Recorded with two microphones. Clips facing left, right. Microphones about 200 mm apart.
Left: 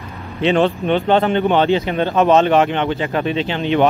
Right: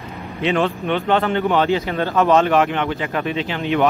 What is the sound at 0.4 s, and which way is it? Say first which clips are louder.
Speech: left 4 dB; 30° left (ahead or behind).